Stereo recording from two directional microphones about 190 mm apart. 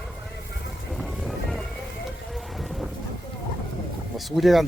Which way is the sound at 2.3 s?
Centre (ahead or behind).